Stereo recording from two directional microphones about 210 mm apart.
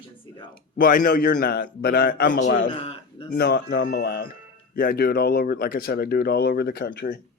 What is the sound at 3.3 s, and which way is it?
Speech, 50° left (ahead or behind).